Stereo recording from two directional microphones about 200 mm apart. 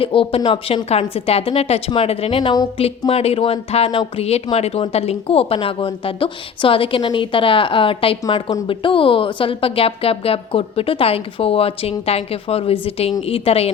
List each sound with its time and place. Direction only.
0.0 s a woman's voice: 25° left (ahead or behind)